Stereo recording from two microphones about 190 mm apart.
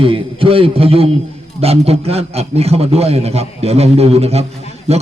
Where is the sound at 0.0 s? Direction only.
30° right (ahead or behind).